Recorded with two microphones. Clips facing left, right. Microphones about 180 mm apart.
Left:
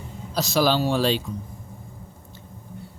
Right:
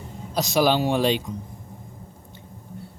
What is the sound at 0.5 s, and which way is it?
Speech, 15° right (ahead or behind).